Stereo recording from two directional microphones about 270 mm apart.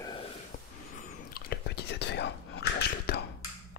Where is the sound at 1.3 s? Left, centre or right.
Left.